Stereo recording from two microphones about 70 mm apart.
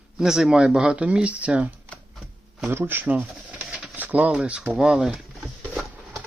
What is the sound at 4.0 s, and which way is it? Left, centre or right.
Speech, right.